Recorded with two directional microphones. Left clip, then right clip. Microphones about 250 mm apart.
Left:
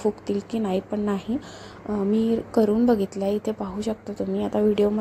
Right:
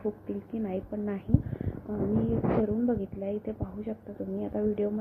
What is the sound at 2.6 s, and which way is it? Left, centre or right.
Speech, left.